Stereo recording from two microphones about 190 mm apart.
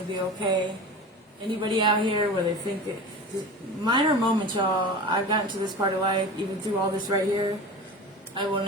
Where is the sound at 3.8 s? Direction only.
25° right (ahead or behind).